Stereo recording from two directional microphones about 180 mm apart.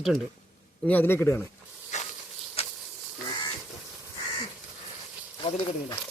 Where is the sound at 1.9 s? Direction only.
40° left (ahead or behind).